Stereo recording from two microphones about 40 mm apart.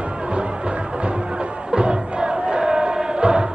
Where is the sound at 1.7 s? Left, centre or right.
Right.